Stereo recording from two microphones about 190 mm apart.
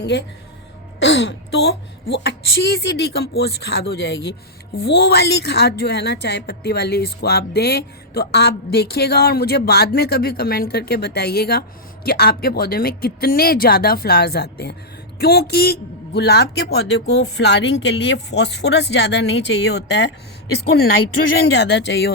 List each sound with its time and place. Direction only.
0.0 s a woman's voice: 65° left (ahead or behind)
0.9 s throat clearing: 70° left (ahead or behind)
2.2 s a woman's voice: 65° left (ahead or behind)
21.4 s a woman's voice: 60° left (ahead or behind)